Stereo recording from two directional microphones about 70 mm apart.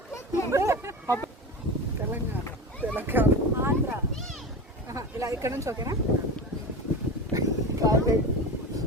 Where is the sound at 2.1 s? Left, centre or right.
Right.